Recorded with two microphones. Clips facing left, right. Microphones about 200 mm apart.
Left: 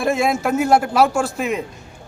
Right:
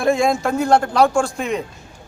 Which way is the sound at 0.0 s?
5° left (ahead or behind).